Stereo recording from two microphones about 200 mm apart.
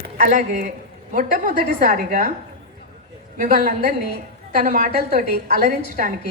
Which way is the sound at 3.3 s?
45° right (ahead or behind).